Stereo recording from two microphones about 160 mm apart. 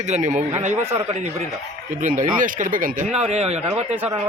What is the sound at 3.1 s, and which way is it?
Speech, 45° right (ahead or behind).